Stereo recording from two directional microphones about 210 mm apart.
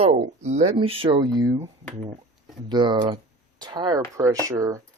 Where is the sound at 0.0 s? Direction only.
30° right (ahead or behind).